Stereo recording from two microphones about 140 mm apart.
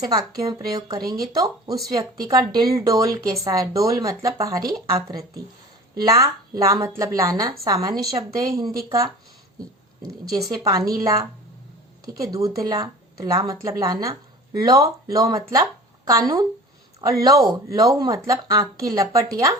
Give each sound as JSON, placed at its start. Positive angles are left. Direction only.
{"t": 0.0, "sound": "speech", "side_deg": -25}
{"t": 1.0, "sound": "speech", "side_deg": -90}
{"t": 1.3, "sound": "speech", "side_deg": -25}
{"t": 10.3, "sound": "speech", "side_deg": -25}